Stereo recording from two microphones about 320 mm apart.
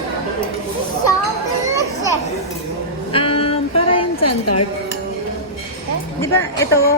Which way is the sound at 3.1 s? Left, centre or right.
Centre.